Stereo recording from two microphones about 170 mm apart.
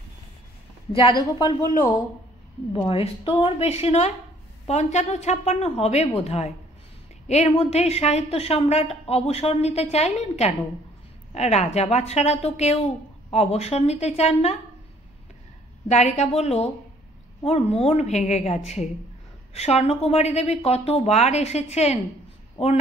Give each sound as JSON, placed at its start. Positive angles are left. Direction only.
{"t": 0.9, "sound": "a woman's voice", "side_deg": 30}
{"t": 2.9, "sound": "a woman's voice", "side_deg": 35}
{"t": 15.9, "sound": "a woman's voice", "side_deg": 40}